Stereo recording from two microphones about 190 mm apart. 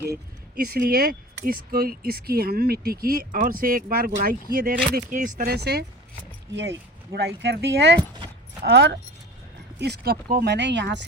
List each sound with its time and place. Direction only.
0.6 s speech: 50° right (ahead or behind)
5.4 s speech: 55° right (ahead or behind)